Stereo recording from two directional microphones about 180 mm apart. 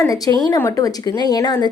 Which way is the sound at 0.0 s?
20° left (ahead or behind).